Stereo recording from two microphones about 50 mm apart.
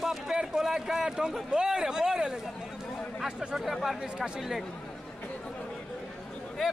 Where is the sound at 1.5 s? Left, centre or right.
Centre.